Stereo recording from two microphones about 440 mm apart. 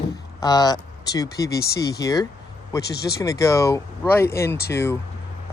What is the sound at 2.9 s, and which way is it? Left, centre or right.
Speech, left.